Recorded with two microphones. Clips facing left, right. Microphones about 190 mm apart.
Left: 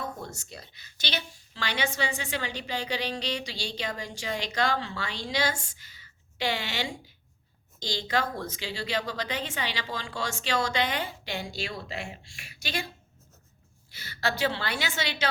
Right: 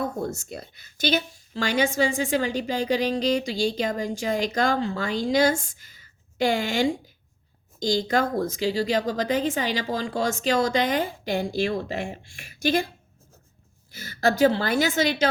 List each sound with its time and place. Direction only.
0.0 s speech: 50° right (ahead or behind)
13.9 s speech: 45° right (ahead or behind)